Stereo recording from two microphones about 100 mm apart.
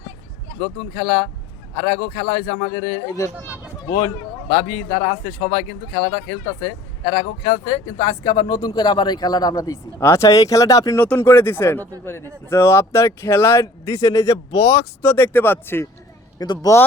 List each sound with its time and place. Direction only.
0.9 s speech: 70° left (ahead or behind)
1.9 s speech: 90° left
3.8 s speech: 35° left (ahead or behind)
4.9 s speech: 55° left (ahead or behind)
7.4 s speech: 45° left (ahead or behind)
11.2 s speech: 25° left (ahead or behind)
15.0 s speech: 20° left (ahead or behind)
16.4 s speech: 40° left (ahead or behind)